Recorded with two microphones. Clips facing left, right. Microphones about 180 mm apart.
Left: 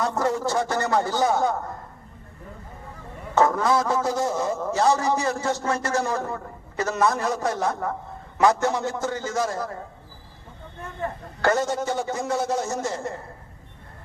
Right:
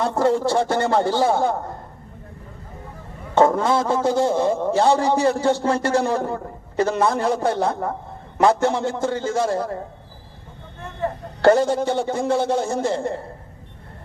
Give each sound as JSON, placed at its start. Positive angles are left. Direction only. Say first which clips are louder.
{"t": 0.0, "sound": "a man's voice", "louder": "right 5 dB", "side_deg": -30}
{"t": 3.3, "sound": "a man's voice", "louder": "right 3 dB", "side_deg": -25}
{"t": 11.4, "sound": "a man's voice", "louder": "right 7 dB", "side_deg": -30}